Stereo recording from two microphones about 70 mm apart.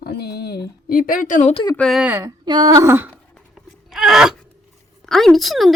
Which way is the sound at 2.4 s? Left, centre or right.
Right.